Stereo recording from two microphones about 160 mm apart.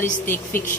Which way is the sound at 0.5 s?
55° left (ahead or behind).